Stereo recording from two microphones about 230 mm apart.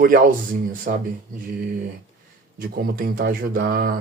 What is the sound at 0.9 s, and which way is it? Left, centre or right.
Speech, right.